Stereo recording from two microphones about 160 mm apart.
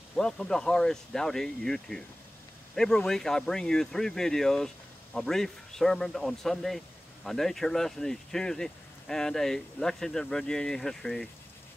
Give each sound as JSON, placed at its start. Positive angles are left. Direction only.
{"t": 0.1, "sound": "speech", "side_deg": 5}